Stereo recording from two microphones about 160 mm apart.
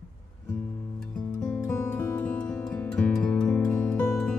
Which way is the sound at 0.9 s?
5° left (ahead or behind).